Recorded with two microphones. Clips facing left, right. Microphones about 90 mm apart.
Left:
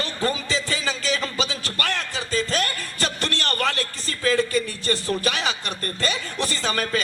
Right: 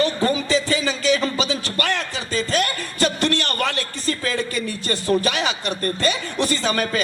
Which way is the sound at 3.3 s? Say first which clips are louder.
Right 1 dB; 35° left (ahead or behind).